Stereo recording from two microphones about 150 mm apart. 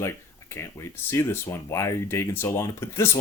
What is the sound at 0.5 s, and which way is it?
Speech, 15° left (ahead or behind).